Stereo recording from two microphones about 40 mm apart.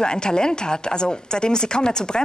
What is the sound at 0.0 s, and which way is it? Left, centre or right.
Speech, left.